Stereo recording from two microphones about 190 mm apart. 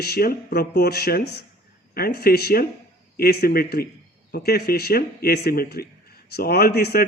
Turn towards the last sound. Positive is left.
turn(degrees=55)  # may be behind; listen again after turning